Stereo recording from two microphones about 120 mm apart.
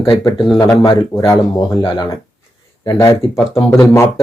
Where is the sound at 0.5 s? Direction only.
30° left (ahead or behind).